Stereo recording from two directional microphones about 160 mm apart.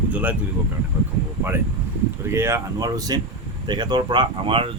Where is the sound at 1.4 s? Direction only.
15° right (ahead or behind).